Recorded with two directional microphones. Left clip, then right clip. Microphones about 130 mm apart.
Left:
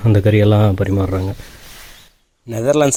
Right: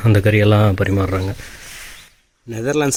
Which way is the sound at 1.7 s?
25° left (ahead or behind).